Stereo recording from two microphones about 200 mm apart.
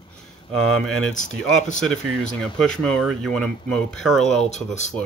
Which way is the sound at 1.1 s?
40° left (ahead or behind).